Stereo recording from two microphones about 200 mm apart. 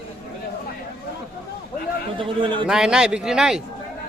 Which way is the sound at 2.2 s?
25° right (ahead or behind).